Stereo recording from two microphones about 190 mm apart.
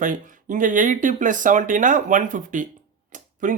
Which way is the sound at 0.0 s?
45° right (ahead or behind).